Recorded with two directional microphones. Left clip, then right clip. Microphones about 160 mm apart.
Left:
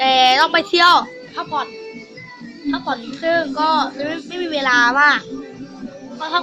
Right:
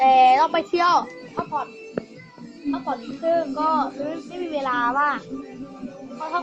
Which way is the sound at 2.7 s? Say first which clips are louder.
Left 5 dB; 40° left (ahead or behind).